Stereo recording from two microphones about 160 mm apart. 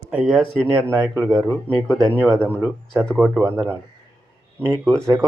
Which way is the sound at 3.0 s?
Centre (ahead or behind).